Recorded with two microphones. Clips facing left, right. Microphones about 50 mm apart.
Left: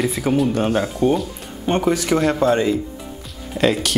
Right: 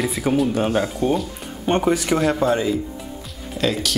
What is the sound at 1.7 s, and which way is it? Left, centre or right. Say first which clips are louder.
Speech: left 1 dB; centre.